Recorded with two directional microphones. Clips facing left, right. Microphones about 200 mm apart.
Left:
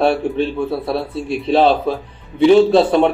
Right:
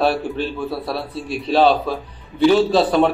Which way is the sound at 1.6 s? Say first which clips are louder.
Right 1 dB; 25° left (ahead or behind).